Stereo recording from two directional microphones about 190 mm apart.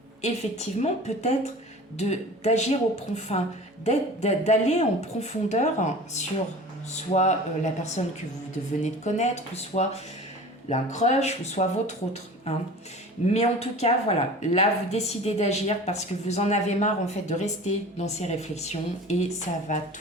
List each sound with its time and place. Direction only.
0.2 s speech: 35° left (ahead or behind)